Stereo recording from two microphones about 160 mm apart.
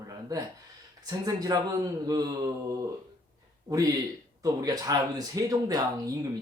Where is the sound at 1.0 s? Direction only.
25° right (ahead or behind).